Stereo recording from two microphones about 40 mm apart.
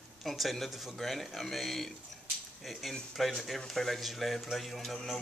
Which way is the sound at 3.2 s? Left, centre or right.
Centre.